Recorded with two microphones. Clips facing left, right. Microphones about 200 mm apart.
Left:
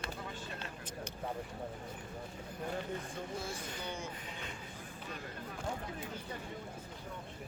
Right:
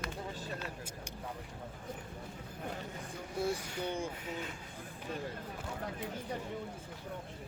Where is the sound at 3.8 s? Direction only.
55° right (ahead or behind).